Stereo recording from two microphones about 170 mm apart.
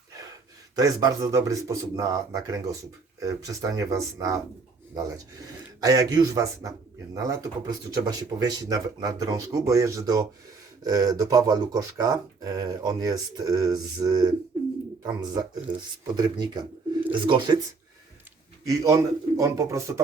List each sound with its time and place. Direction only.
0.8 s speech: 20° right (ahead or behind)
18.7 s speech: 20° right (ahead or behind)